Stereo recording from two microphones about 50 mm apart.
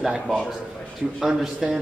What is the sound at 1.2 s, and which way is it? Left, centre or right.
Speech, centre.